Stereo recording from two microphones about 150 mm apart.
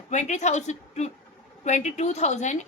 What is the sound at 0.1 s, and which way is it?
A woman's voice, 50° left (ahead or behind).